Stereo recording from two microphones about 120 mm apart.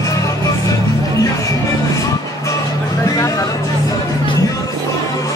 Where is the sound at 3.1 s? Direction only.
30° left (ahead or behind).